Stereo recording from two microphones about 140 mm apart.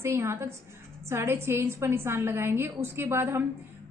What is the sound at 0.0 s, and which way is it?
A woman's voice, 20° right (ahead or behind).